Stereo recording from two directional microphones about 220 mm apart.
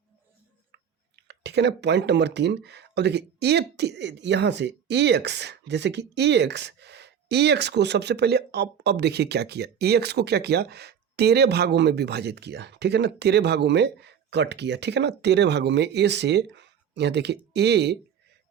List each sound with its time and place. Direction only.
0.7 s speech: 50° right (ahead or behind)